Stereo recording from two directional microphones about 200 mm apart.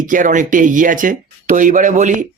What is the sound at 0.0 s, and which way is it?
Speech, 40° right (ahead or behind).